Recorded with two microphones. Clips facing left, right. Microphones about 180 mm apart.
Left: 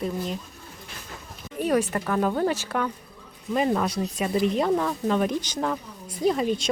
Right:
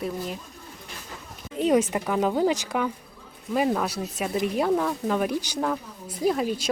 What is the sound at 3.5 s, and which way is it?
Speech, 5° right (ahead or behind).